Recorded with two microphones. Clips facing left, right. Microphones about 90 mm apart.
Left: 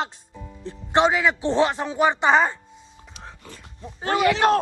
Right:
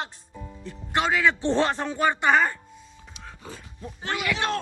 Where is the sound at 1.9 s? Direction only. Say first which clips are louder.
Left 3 dB; 20° left (ahead or behind).